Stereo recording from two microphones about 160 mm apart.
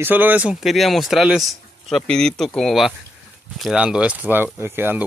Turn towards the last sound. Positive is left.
turn(degrees=-15)  # may be behind; listen again after turning